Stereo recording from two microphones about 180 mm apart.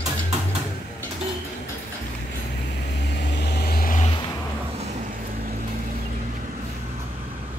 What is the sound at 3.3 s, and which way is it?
Vehicle, 60° left (ahead or behind).